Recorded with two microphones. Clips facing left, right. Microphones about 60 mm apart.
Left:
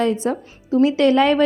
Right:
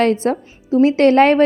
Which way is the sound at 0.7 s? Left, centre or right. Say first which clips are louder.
Right 3 dB; right.